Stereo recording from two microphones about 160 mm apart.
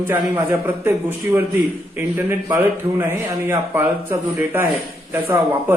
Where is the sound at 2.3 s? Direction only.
20° right (ahead or behind).